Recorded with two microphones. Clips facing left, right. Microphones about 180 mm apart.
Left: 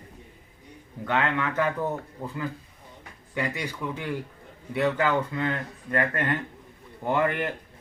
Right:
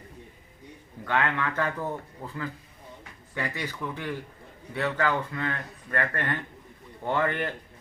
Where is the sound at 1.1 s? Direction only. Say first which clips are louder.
Left 1 dB; 20° left (ahead or behind).